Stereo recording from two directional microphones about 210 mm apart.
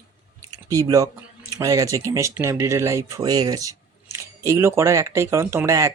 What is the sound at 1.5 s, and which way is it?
Speech, 15° right (ahead or behind).